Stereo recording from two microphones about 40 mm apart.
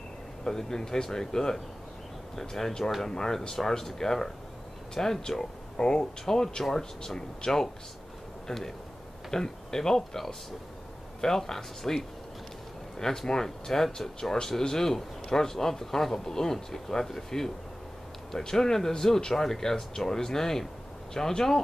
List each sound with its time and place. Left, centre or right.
0.4 s speech: centre
13.0 s speech: centre